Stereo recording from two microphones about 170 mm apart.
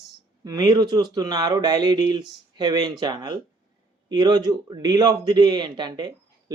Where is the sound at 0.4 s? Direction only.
25° right (ahead or behind).